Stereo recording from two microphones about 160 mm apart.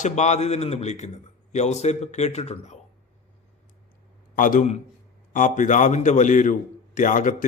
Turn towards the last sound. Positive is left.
turn(degrees=55)  # may be behind; listen again after turning